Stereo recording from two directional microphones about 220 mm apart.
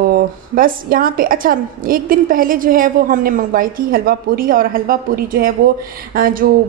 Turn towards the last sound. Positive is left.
turn(degrees=-40)  # may be behind; listen again after turning